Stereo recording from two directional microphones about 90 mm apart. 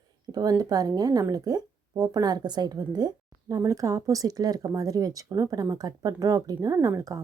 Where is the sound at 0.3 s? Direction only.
45° right (ahead or behind).